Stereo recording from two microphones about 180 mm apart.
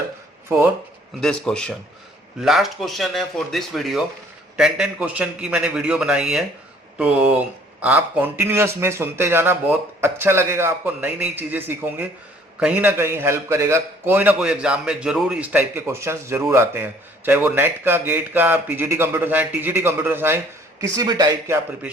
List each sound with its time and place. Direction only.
0.4 s speech: 15° right (ahead or behind)
1.2 s a man's voice: centre (ahead or behind)
7.8 s a man's voice: 10° right (ahead or behind)